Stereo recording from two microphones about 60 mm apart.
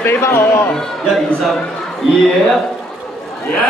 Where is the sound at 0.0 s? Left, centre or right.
Left.